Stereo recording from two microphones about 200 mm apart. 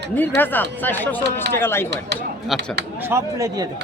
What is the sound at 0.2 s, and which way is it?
Speech, 10° left (ahead or behind).